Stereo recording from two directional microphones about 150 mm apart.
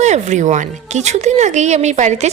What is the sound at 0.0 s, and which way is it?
A woman's voice, 50° right (ahead or behind).